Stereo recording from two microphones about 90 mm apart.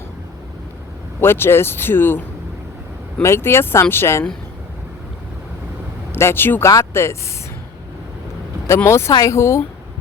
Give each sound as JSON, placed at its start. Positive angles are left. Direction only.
{"t": 1.2, "sound": "speech", "side_deg": 25}
{"t": 6.1, "sound": "speech", "side_deg": 25}
{"t": 8.6, "sound": "speech", "side_deg": 30}